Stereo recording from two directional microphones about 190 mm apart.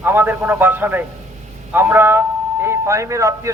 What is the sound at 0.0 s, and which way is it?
A man's voice, 10° right (ahead or behind).